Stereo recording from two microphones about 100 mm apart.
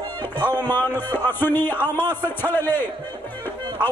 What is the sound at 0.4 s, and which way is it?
A man's voice, 20° left (ahead or behind).